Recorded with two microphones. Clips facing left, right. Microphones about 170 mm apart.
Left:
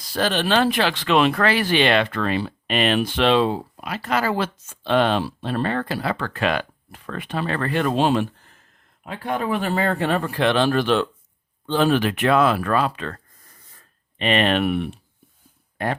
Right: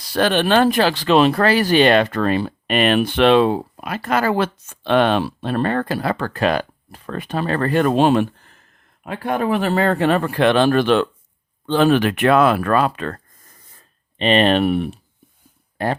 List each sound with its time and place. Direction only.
0.0 s speech: 65° right (ahead or behind)
9.0 s speech: 65° right (ahead or behind); by 13.2 s 50° right (ahead or behind)
14.2 s speech: 30° right (ahead or behind)